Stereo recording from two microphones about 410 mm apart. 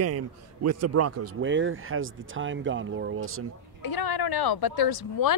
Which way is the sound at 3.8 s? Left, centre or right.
Left.